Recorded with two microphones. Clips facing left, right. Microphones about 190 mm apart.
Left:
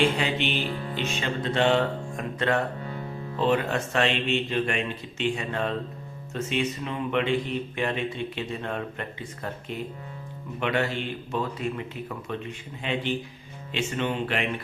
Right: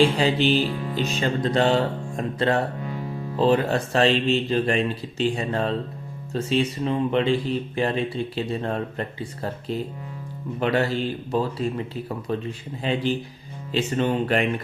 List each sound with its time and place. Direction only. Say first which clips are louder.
0.0 s speech: right 5 dB; 35° right (ahead or behind)